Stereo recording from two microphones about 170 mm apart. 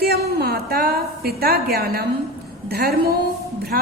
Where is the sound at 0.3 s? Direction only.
65° right (ahead or behind).